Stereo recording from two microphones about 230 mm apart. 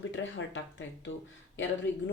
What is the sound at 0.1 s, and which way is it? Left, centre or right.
Speech, left.